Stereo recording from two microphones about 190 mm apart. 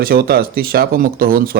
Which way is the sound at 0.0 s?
55° right (ahead or behind).